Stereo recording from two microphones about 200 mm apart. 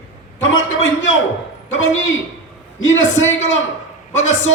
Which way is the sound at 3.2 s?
75° left (ahead or behind).